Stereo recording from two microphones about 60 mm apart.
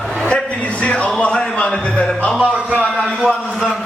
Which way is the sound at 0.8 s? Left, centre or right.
Centre.